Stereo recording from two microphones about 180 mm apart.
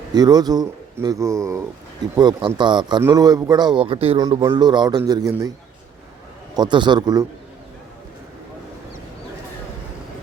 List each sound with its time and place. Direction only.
0.1 s a man's voice: 20° right (ahead or behind)
6.6 s a man's voice: 25° right (ahead or behind)